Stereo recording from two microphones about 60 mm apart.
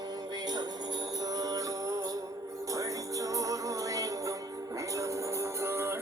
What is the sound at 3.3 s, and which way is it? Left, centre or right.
Music, right.